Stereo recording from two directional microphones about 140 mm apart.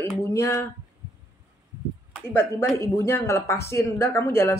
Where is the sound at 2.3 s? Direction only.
20° left (ahead or behind).